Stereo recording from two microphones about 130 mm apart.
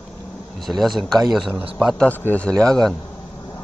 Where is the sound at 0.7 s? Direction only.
Centre (ahead or behind).